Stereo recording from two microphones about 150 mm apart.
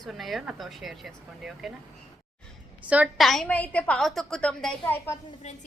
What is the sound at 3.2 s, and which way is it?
A woman's voice, centre (ahead or behind).